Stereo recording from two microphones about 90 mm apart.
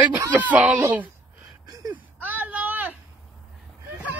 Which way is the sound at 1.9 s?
20° right (ahead or behind).